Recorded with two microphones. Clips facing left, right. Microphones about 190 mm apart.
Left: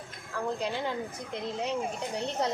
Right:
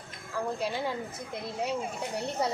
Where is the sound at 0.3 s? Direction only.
5° right (ahead or behind).